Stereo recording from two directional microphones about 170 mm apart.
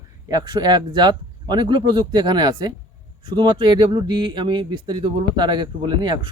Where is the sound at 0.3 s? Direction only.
25° right (ahead or behind).